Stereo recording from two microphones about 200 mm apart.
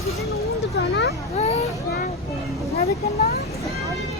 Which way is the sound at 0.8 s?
60° left (ahead or behind).